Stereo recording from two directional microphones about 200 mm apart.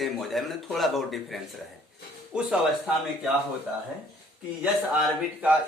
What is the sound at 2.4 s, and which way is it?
Speech, 5° right (ahead or behind).